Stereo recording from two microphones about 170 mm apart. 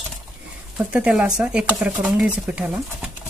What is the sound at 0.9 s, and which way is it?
Speech, 5° right (ahead or behind).